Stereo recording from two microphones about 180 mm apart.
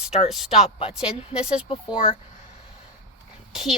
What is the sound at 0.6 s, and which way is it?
Speech, 35° left (ahead or behind).